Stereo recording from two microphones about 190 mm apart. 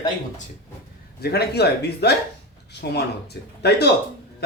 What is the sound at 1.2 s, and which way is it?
Speech, 55° left (ahead or behind).